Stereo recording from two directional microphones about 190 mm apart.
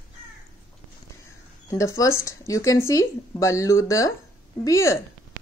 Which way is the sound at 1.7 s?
15° left (ahead or behind).